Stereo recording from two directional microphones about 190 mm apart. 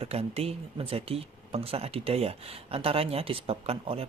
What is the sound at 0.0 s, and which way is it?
Speech, 30° right (ahead or behind).